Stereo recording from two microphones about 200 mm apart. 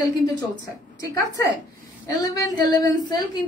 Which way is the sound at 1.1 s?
20° left (ahead or behind).